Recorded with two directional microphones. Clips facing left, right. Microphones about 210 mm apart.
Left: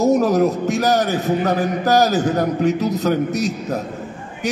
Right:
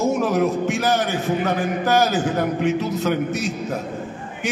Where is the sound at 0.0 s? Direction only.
40° left (ahead or behind).